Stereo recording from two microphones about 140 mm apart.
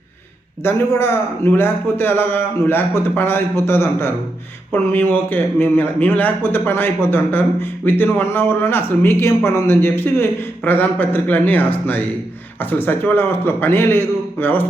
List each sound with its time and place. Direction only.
0.6 s speech: 15° left (ahead or behind)